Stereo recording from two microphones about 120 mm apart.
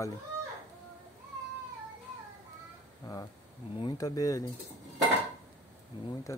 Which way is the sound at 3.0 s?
35° left (ahead or behind).